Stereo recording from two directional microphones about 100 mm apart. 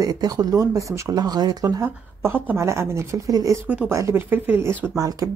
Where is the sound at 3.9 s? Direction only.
30° right (ahead or behind).